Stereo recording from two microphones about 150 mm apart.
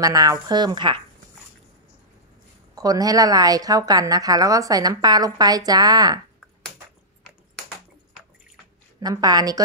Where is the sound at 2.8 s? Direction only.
25° right (ahead or behind).